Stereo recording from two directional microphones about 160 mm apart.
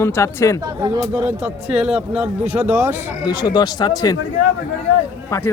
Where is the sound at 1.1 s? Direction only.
10° right (ahead or behind).